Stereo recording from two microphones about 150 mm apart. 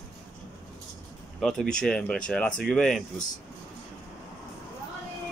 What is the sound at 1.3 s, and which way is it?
Speech, 5° left (ahead or behind).